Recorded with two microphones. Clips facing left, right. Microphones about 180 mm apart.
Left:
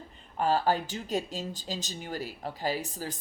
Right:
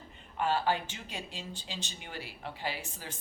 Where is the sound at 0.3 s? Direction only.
40° left (ahead or behind).